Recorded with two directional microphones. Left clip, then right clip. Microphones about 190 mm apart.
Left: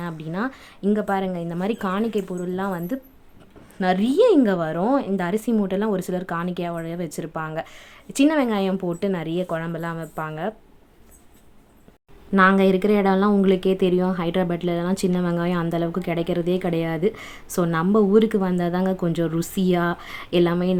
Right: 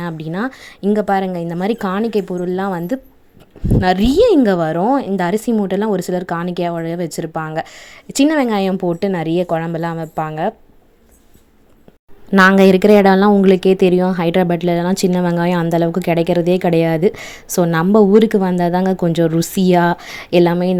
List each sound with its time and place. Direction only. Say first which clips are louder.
0.0 s speech: right 6 dB; 30° right (ahead or behind)
12.3 s speech: right 7 dB; 45° right (ahead or behind)